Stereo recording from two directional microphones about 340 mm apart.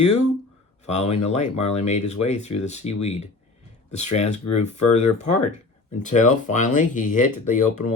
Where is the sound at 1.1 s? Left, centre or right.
Centre.